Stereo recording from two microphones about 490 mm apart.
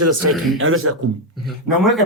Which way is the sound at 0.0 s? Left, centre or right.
Right.